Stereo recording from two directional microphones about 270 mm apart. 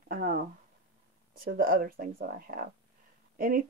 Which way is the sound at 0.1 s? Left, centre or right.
Right.